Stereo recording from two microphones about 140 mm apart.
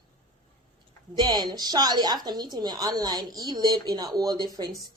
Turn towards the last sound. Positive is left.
turn(degrees=-30)  # may be behind; listen again after turning